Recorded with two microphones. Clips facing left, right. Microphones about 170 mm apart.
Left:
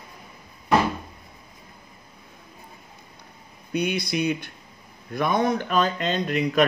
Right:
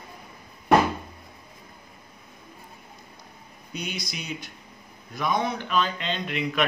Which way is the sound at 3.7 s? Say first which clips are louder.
Left 10 dB; 60° left (ahead or behind).